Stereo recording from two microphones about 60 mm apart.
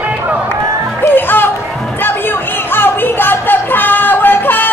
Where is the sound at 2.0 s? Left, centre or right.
Left.